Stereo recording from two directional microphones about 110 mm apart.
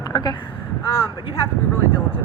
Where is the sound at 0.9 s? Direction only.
55° left (ahead or behind).